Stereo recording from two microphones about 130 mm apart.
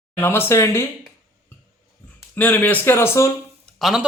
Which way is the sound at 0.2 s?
20° left (ahead or behind).